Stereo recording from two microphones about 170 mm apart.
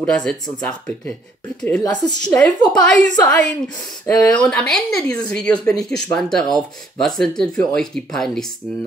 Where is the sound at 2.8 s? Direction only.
45° right (ahead or behind).